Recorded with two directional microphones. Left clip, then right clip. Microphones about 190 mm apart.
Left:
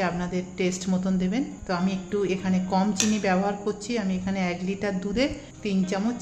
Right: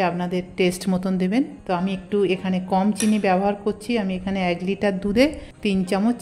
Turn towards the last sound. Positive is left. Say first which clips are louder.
# right 5 dB
turn(degrees=-45)  # may be behind; listen again after turning